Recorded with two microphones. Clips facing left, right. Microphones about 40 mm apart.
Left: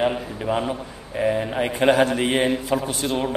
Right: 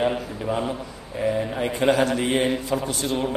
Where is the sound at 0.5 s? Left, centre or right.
Left.